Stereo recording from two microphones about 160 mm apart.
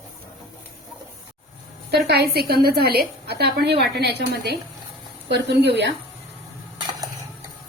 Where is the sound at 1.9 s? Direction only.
90° right.